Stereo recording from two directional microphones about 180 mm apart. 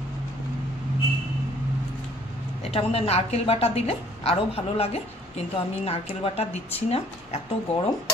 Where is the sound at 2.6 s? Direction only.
35° left (ahead or behind).